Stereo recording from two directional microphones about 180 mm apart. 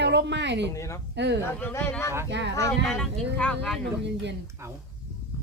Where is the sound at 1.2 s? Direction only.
70° right (ahead or behind).